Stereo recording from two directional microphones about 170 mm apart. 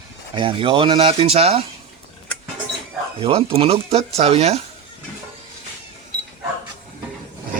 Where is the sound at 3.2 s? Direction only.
35° right (ahead or behind).